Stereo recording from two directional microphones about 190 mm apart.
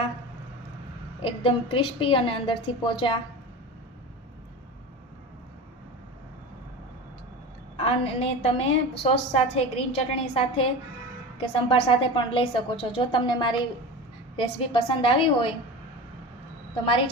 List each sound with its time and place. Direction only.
1.2 s a woman's voice: 30° left (ahead or behind)
7.8 s a woman's voice: 30° left (ahead or behind)